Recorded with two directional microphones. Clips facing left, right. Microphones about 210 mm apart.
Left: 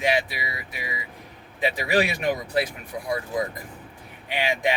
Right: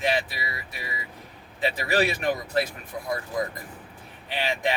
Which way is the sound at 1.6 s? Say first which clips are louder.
Left 1 dB; 15° left (ahead or behind).